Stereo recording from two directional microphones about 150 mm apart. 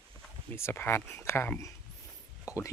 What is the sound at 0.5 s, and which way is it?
Speech, 15° left (ahead or behind).